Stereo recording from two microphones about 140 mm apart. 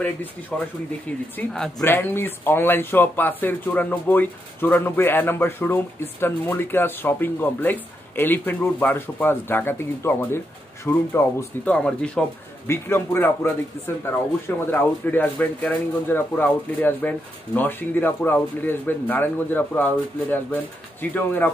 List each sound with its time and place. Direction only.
0.5 s speech: 5° left (ahead or behind)
1.8 s speech: 15° left (ahead or behind)